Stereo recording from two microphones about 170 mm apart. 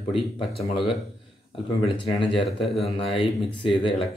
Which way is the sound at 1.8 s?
30° left (ahead or behind).